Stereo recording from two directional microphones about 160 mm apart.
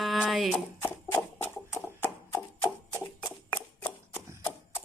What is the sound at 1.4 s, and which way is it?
Horse, 15° left (ahead or behind).